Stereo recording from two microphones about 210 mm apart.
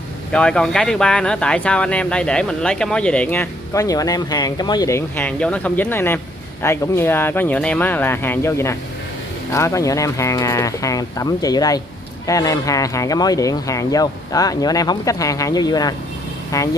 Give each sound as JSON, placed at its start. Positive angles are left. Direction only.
{"t": 0.3, "sound": "speech", "side_deg": 5}